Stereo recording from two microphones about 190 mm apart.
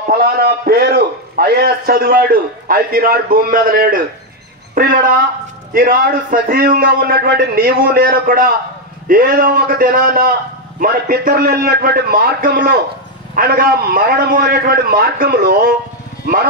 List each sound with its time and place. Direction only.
0.1 s a man's voice: 55° right (ahead or behind)